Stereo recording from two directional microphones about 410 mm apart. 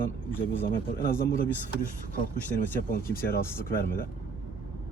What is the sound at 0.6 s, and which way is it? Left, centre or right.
Speech, left.